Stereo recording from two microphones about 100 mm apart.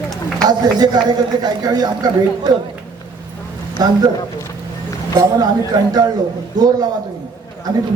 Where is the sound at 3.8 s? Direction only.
40° right (ahead or behind).